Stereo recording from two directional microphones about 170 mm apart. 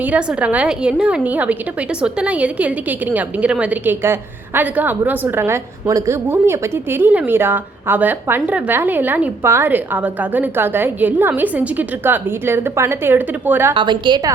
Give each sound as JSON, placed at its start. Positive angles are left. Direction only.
{"t": 0.0, "sound": "a woman's voice", "side_deg": -5}
{"t": 13.7, "sound": "a woman's voice", "side_deg": -30}